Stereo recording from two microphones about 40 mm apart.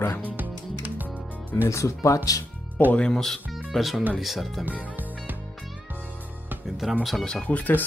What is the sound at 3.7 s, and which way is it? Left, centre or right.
Speech, centre.